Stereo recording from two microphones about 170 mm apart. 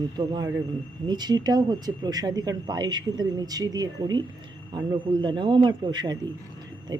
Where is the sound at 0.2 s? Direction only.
25° right (ahead or behind).